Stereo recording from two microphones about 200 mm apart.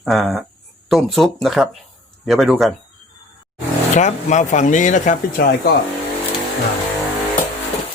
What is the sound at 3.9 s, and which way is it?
Speech, 35° left (ahead or behind).